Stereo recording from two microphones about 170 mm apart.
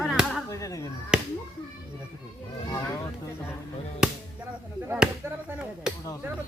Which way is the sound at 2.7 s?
20° left (ahead or behind).